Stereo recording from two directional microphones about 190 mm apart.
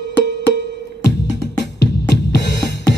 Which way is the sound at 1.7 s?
65° left (ahead or behind).